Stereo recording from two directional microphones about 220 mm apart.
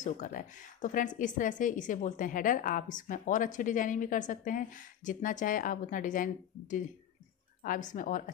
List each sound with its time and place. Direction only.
0.0 s a woman's voice: 35° left (ahead or behind)